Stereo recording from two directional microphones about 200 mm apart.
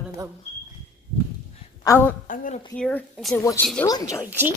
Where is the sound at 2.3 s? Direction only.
40° left (ahead or behind).